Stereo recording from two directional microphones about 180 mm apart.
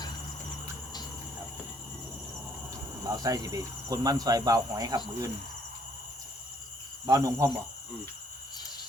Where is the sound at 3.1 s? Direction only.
20° right (ahead or behind).